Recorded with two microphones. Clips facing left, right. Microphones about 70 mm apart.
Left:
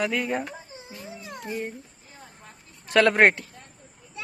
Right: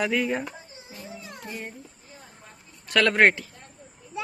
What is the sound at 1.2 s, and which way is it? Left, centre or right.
Speech, centre.